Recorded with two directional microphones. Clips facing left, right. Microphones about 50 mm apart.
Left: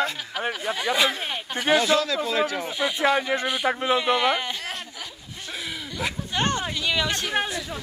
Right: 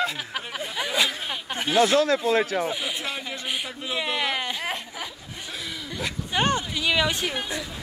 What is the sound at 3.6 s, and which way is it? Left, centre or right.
Speech, left.